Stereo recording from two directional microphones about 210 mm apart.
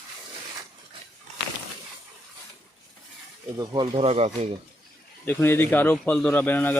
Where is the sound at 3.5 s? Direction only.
20° right (ahead or behind).